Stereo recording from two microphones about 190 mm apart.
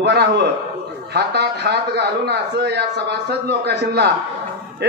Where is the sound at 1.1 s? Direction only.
60° right (ahead or behind).